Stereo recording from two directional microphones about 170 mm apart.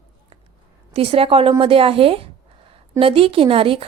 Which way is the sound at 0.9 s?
35° right (ahead or behind).